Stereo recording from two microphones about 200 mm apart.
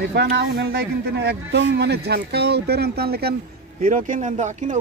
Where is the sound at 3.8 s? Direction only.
40° right (ahead or behind).